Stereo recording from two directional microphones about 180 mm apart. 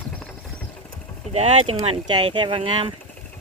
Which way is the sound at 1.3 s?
35° right (ahead or behind).